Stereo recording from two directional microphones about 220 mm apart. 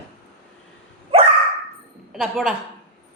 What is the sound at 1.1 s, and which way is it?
Dog, 25° right (ahead or behind).